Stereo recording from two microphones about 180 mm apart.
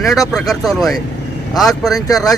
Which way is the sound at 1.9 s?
20° left (ahead or behind).